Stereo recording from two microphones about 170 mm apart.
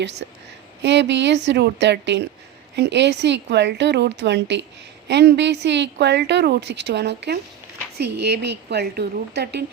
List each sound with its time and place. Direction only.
0.2 s a woman's voice: 80° right
0.8 s a woman's voice: 90° right